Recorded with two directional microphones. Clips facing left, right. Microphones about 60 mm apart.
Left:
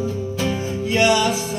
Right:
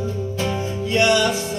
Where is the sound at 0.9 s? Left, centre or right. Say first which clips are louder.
Even; centre.